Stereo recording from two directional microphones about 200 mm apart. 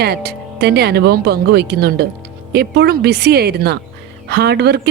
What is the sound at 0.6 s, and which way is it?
A woman's voice, 55° right (ahead or behind).